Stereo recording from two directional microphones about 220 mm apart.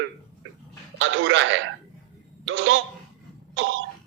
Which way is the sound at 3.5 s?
60° right (ahead or behind).